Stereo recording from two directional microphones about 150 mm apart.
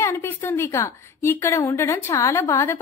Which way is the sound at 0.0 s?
15° left (ahead or behind).